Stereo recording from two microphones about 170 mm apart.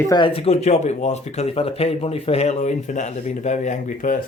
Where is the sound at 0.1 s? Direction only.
30° left (ahead or behind); by 4.2 s 50° left (ahead or behind).